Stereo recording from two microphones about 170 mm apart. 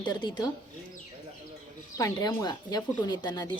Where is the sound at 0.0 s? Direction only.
25° left (ahead or behind).